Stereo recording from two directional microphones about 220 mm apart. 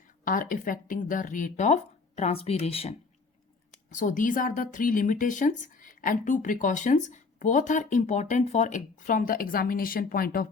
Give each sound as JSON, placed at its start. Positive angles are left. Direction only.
{"t": 0.3, "sound": "a woman's voice", "side_deg": 40}
{"t": 3.9, "sound": "a woman's voice", "side_deg": 35}